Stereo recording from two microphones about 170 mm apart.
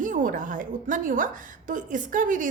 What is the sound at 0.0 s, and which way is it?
A woman's voice, 50° right (ahead or behind).